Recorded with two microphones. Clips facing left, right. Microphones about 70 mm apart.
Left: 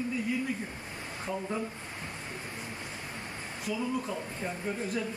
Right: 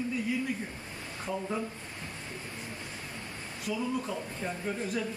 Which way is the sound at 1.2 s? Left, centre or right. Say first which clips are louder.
Right 1 dB; centre.